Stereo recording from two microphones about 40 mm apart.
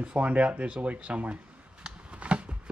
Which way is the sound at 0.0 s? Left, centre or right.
Right.